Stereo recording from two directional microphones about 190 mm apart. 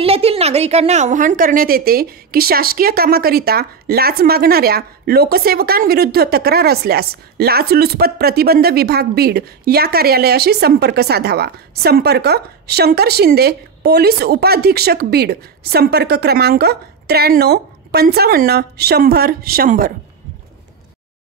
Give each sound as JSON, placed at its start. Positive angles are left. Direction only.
{"t": 0.0, "sound": "a woman's voice", "side_deg": -30}